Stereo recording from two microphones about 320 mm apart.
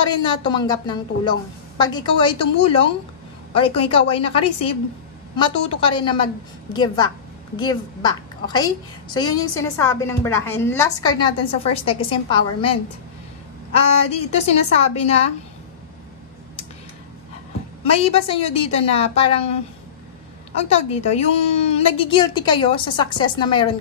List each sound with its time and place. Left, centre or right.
0.2 s a woman's voice: centre
13.7 s a woman's voice: centre
18.0 s a woman's voice: centre
20.5 s a woman's voice: centre